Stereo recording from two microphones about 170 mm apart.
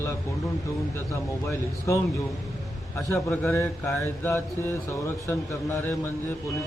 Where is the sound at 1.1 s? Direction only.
15° left (ahead or behind).